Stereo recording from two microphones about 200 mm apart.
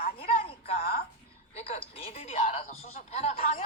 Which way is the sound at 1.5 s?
30° left (ahead or behind).